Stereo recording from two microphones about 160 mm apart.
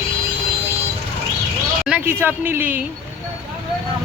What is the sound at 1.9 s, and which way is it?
Speech, 15° right (ahead or behind).